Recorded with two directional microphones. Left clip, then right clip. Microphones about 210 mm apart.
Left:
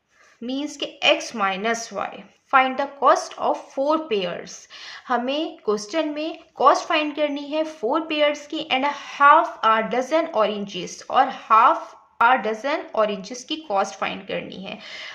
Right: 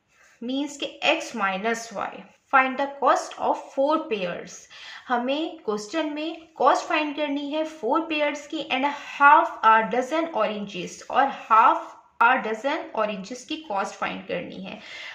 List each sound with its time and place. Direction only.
0.4 s a woman's voice: 40° left (ahead or behind)